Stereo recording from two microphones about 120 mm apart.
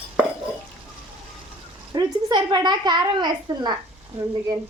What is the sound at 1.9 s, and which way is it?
A woman's voice, 40° right (ahead or behind).